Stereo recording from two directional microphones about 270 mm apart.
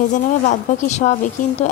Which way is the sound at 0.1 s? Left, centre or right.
Left.